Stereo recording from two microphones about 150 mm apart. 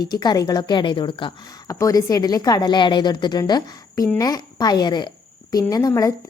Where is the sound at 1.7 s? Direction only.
20° left (ahead or behind).